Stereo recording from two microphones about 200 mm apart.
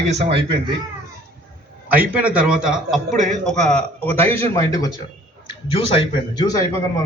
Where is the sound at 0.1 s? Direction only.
30° right (ahead or behind).